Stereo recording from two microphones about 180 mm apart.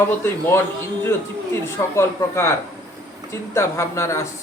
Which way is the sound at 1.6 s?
15° left (ahead or behind).